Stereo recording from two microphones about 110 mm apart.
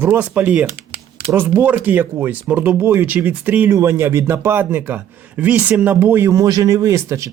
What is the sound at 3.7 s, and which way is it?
A man's voice, 25° right (ahead or behind).